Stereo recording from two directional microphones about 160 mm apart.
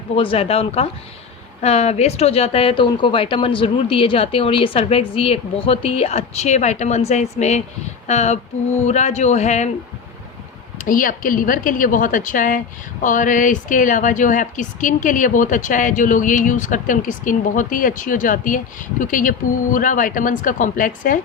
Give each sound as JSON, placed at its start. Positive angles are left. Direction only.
{"t": 0.2, "sound": "a man's voice", "side_deg": 35}
{"t": 10.8, "sound": "a woman's voice", "side_deg": 60}